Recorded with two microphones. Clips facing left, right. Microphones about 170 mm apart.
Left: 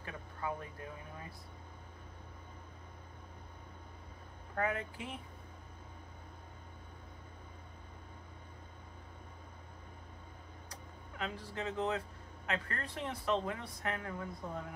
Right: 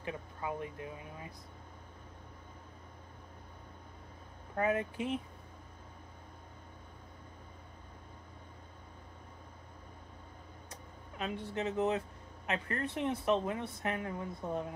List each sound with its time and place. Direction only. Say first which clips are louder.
0.0 s speech: right 2 dB; 20° right (ahead or behind)
4.6 s speech: right 4 dB; 20° right (ahead or behind)
10.7 s vehicle: right 1 dB; 25° right (ahead or behind)
12.4 s speech: right 3 dB; 20° right (ahead or behind)